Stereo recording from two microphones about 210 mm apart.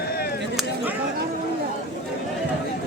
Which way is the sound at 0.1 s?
50° left (ahead or behind).